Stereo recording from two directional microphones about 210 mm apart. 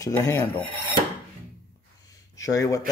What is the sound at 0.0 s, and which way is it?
Filing, 15° left (ahead or behind).